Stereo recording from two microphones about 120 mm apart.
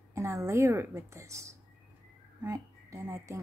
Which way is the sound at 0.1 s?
25° right (ahead or behind).